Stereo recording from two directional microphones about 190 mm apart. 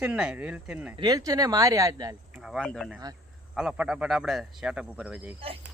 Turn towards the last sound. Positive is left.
turn(degrees=-5)  # may be behind; listen again after turning